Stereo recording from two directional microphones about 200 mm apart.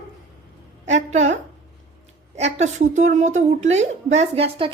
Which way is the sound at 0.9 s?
35° right (ahead or behind).